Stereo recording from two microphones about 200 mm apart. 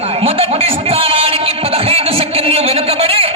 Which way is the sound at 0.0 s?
30° right (ahead or behind).